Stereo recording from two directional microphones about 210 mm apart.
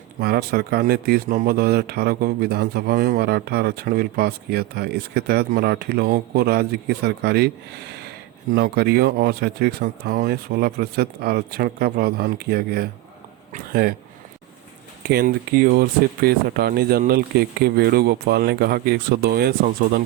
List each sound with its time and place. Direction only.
0.2 s speech: 50° right (ahead or behind)
15.1 s speech: 45° right (ahead or behind)